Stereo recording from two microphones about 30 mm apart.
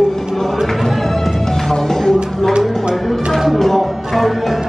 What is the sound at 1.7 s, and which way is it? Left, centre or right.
Music, centre.